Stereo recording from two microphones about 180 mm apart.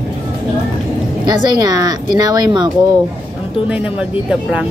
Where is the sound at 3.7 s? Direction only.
5° right (ahead or behind).